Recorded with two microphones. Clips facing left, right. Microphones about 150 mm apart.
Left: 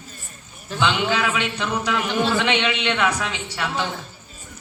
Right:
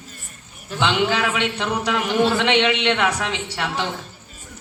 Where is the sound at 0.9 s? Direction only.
70° right (ahead or behind).